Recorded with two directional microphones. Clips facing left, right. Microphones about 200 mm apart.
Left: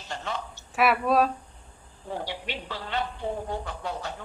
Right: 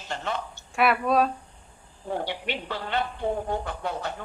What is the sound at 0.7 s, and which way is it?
Speech, centre (ahead or behind).